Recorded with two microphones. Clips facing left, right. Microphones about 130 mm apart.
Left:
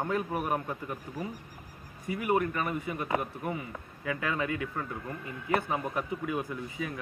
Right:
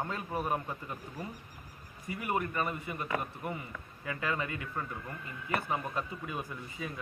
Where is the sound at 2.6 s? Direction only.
20° left (ahead or behind).